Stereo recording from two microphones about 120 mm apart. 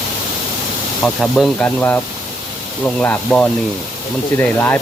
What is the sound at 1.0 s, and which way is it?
Speech, 5° left (ahead or behind).